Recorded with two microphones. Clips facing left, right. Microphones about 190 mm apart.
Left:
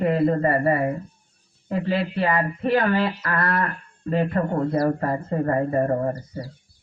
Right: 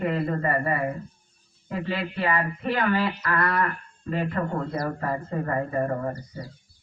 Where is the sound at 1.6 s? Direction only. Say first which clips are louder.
Left 5 dB; 35° left (ahead or behind).